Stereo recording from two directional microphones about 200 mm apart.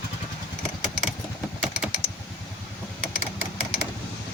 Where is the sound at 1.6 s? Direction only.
5° right (ahead or behind).